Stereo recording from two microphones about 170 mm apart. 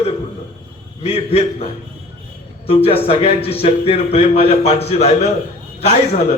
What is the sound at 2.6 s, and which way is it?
A man's voice, 35° left (ahead or behind).